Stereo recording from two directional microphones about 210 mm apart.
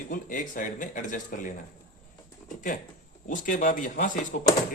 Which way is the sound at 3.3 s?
40° left (ahead or behind).